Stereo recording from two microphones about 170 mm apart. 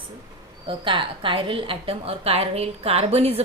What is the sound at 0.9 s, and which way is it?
A woman's voice, 30° right (ahead or behind).